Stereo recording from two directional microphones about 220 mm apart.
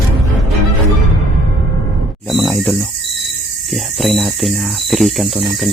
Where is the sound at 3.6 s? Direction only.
Centre (ahead or behind).